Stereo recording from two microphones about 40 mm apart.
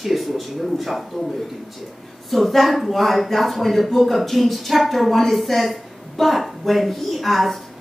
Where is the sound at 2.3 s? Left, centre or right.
Centre.